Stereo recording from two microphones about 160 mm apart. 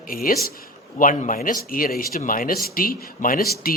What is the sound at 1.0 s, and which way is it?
Speech, 55° left (ahead or behind).